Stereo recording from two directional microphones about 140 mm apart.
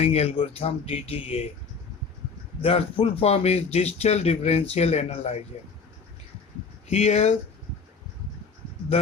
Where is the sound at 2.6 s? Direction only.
45° left (ahead or behind).